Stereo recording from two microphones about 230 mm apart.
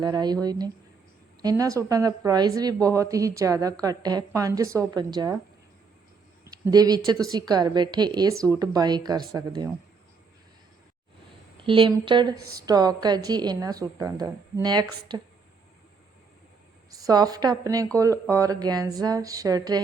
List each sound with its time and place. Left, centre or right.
0.0 s a woman's voice: centre
1.4 s a woman's voice: centre
6.4 s a woman's voice: centre
11.6 s a woman's voice: right
16.9 s a woman's voice: centre